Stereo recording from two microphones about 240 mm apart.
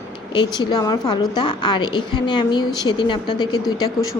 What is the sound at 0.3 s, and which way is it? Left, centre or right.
A woman's voice, centre.